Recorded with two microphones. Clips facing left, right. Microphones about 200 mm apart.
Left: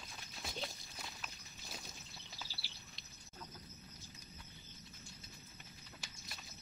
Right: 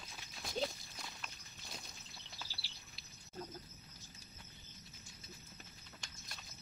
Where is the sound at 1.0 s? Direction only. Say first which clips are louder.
Left 1 dB; 5° left (ahead or behind).